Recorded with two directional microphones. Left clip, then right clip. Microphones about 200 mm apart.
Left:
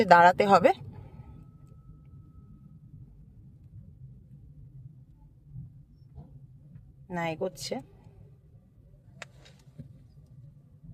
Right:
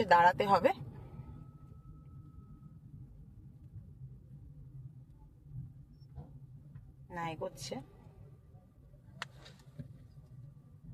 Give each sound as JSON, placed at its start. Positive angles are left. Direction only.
{"t": 0.0, "sound": "speech", "side_deg": 60}
{"t": 7.1, "sound": "speech", "side_deg": 55}